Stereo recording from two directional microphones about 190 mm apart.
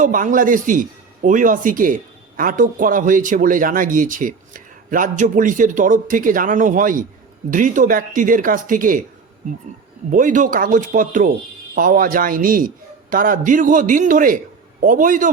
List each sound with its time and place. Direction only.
0.0 s a man's voice: 45° right (ahead or behind)
10.1 s a man's voice: 45° right (ahead or behind)